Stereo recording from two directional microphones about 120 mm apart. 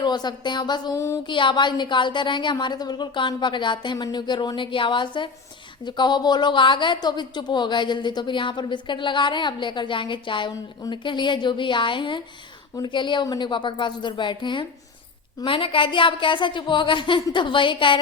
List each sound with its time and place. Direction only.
0.0 s a woman's voice: 35° left (ahead or behind)
0.9 s a sound: 25° left (ahead or behind)
1.3 s a woman's voice: 40° left (ahead or behind)